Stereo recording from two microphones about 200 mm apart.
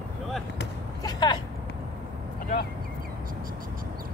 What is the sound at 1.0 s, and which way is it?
Speech, 20° left (ahead or behind).